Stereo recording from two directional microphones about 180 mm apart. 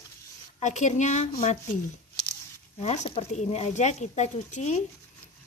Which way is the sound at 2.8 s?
40° left (ahead or behind).